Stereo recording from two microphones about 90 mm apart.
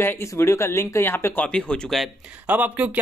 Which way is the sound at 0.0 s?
25° left (ahead or behind).